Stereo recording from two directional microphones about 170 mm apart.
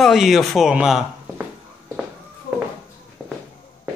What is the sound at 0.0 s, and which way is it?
Speech, centre (ahead or behind).